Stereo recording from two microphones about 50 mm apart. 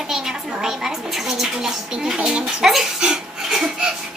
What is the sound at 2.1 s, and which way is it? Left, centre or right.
Speech, right.